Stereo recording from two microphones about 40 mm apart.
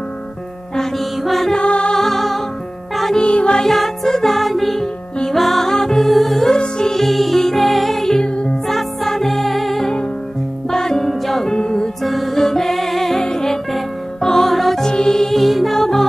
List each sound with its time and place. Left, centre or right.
1.1 s music: centre
1.5 s music: left
2.0 s music: centre
3.2 s music: left
3.6 s music: centre
6.5 s music: centre
8.2 s music: left
8.6 s music: centre
11.5 s music: centre
12.0 s music: centre
14.9 s music: centre
15.3 s music: centre